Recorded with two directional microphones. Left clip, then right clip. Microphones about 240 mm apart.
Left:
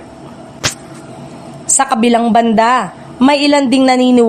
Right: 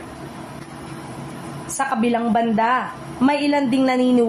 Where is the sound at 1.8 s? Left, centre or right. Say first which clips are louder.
Left 8 dB; left.